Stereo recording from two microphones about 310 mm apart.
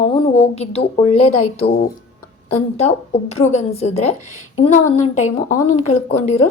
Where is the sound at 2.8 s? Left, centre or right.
Left.